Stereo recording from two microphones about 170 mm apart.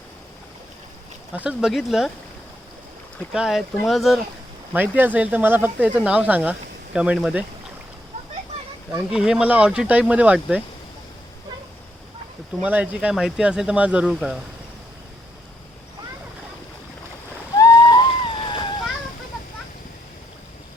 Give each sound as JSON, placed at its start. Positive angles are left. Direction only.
{"t": 1.3, "sound": "speech", "side_deg": -5}
{"t": 3.3, "sound": "speech", "side_deg": -5}
{"t": 4.7, "sound": "speech", "side_deg": -10}
{"t": 9.0, "sound": "speech", "side_deg": -5}
{"t": 12.6, "sound": "speech", "side_deg": -10}
{"t": 17.6, "sound": "a sound", "side_deg": 20}